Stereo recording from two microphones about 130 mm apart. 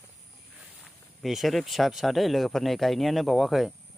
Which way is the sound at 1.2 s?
Centre (ahead or behind).